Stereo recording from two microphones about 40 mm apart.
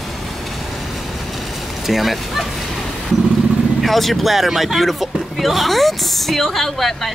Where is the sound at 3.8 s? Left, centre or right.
Centre.